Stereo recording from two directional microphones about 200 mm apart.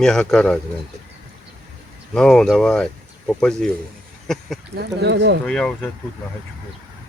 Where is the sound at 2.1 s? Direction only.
5° left (ahead or behind).